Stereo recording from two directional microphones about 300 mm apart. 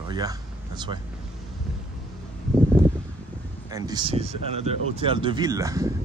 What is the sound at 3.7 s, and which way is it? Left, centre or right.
Speech, centre.